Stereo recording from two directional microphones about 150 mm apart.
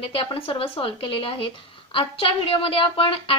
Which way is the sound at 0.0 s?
35° left (ahead or behind).